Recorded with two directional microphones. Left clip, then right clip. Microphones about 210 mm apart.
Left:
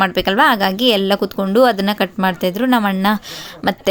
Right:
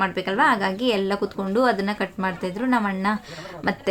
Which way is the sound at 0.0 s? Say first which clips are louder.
Left 7 dB; 45° left (ahead or behind).